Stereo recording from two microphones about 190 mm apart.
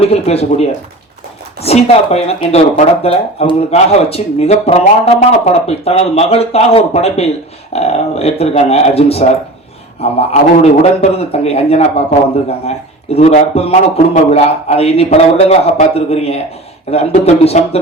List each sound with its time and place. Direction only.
0.0 s speech: 35° left (ahead or behind)
1.6 s speech: 35° left (ahead or behind)
13.1 s speech: 35° left (ahead or behind)